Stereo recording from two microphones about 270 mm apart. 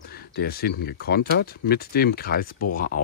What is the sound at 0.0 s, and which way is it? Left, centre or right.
Speech, left.